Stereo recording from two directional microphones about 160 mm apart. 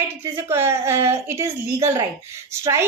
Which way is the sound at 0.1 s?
15° right (ahead or behind).